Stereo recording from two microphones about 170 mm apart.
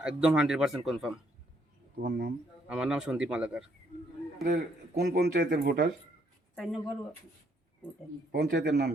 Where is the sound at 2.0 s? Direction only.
80° right.